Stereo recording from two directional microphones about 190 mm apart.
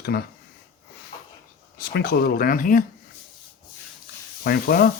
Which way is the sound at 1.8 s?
55° left (ahead or behind).